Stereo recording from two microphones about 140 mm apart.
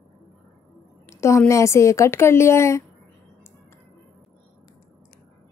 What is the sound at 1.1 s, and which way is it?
A woman's voice, 20° left (ahead or behind).